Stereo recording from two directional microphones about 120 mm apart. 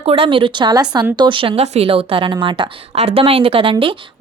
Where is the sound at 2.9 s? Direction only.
55° right (ahead or behind).